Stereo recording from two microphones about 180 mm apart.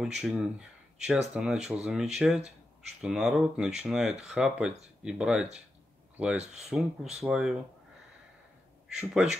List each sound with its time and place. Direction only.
0.0 s speech: 5° right (ahead or behind)
6.3 s speech: 40° right (ahead or behind)
7.2 s speech: 5° right (ahead or behind)
8.8 s speech: 5° right (ahead or behind)